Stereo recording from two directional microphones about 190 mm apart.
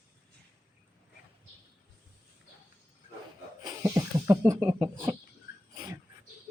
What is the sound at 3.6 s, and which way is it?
Speech, 15° right (ahead or behind).